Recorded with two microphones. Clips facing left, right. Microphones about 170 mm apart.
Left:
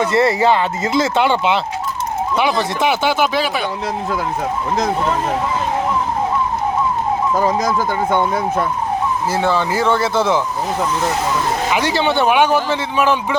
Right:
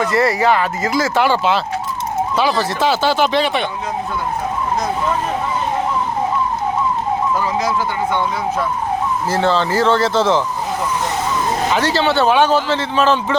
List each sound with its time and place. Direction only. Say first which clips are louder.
0.0 s speech: left 1 dB; 25° left (ahead or behind)
2.8 s speech: right 1 dB; 15° left (ahead or behind)
7.3 s speech: left 2 dB; 40° left (ahead or behind)
9.3 s speech: right 3 dB; 10° left (ahead or behind)
11.7 s speech: even; 15° left (ahead or behind)